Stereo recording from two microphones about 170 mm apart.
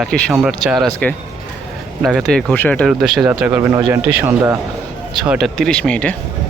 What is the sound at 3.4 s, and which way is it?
A man's voice, 15° right (ahead or behind).